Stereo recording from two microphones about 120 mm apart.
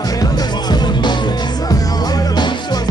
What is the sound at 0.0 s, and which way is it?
Music, 30° left (ahead or behind).